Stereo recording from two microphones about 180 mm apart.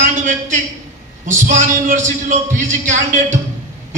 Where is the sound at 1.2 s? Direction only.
40° right (ahead or behind).